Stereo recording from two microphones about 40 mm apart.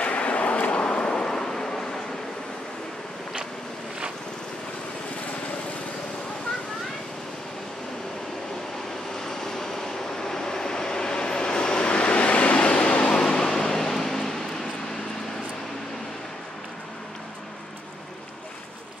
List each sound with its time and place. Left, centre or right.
0.0 s vehicle: left; by 2.0 s centre
9.1 s train: centre
13.2 s vehicle: centre